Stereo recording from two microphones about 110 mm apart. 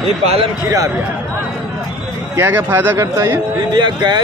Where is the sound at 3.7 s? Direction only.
40° right (ahead or behind).